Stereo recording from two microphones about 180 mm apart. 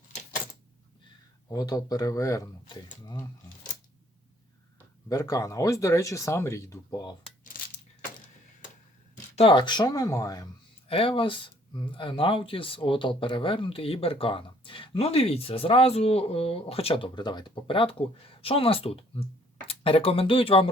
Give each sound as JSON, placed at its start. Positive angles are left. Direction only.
{"t": 1.5, "sound": "speech", "side_deg": 20}
{"t": 5.0, "sound": "speech", "side_deg": 20}
{"t": 7.5, "sound": "coin", "side_deg": 50}
{"t": 9.3, "sound": "speech", "side_deg": 30}
{"t": 10.8, "sound": "speech", "side_deg": 30}